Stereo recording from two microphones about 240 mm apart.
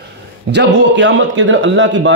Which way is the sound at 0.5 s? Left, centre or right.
Right.